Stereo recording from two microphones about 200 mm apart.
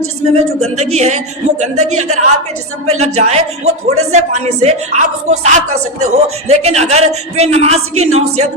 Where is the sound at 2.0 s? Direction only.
35° right (ahead or behind).